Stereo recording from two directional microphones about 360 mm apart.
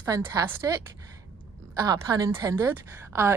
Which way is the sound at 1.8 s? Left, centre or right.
Centre.